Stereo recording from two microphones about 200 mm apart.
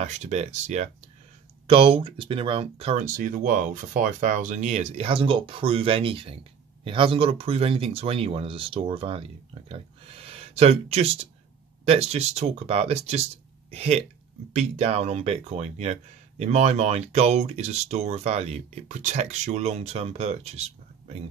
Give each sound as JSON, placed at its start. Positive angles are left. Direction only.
{"t": 0.0, "sound": "speech", "side_deg": -35}
{"t": 3.2, "sound": "speech", "side_deg": -40}